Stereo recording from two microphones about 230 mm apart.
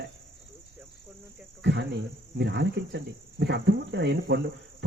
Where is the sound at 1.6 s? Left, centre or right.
Right.